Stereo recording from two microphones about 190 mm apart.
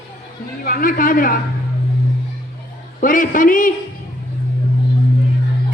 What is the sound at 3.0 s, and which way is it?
Speech, 45° left (ahead or behind).